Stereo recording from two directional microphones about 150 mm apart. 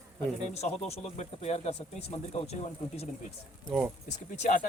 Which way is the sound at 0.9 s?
45° left (ahead or behind).